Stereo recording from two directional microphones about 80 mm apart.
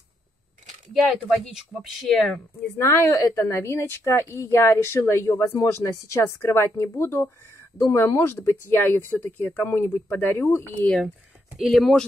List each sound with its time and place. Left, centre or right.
1.1 s speech: centre
2.8 s a woman's voice: left
10.8 s speech: centre
11.5 s speech: centre